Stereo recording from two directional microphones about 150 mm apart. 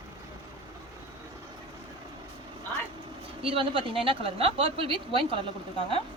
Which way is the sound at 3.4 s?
35° right (ahead or behind).